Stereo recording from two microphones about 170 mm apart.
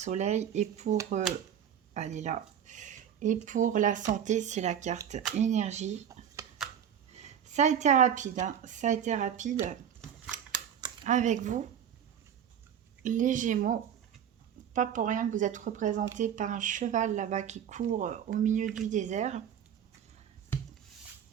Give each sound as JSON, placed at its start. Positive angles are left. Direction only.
{"t": 0.0, "sound": "speech", "side_deg": -40}
{"t": 6.4, "sound": "a sound", "side_deg": -20}
{"t": 7.1, "sound": "speech", "side_deg": -40}
{"t": 11.0, "sound": "speech", "side_deg": -45}
{"t": 13.0, "sound": "speech", "side_deg": -50}